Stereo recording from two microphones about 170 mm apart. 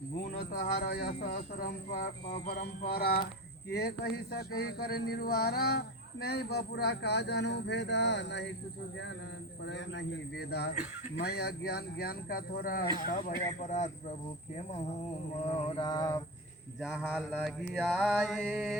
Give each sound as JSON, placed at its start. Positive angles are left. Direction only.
{"t": 0.3, "sound": "speech", "side_deg": 60}
{"t": 9.6, "sound": "speech", "side_deg": 90}
{"t": 15.4, "sound": "mantra", "side_deg": 30}
{"t": 16.8, "sound": "mantra", "side_deg": -5}